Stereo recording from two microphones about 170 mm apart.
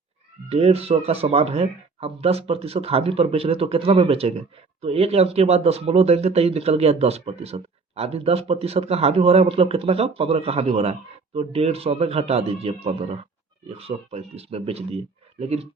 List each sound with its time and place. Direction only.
0.4 s speech: 35° right (ahead or behind)